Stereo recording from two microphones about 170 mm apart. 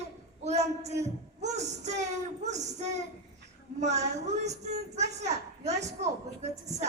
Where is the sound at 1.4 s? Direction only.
40° right (ahead or behind).